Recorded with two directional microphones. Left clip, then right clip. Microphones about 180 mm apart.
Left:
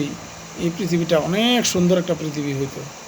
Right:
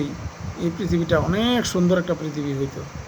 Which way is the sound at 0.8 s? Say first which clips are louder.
Left 2 dB; 15° right (ahead or behind).